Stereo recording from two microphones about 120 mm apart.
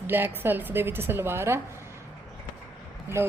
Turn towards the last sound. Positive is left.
turn(degrees=-20)  # may be behind; listen again after turning